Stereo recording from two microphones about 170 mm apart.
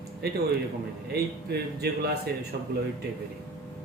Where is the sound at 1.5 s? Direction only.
70° right (ahead or behind).